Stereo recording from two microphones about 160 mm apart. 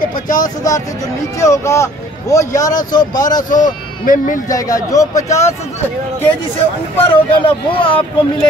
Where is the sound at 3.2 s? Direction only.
60° left (ahead or behind).